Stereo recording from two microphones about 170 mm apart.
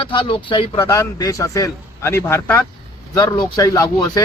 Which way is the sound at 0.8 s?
15° left (ahead or behind).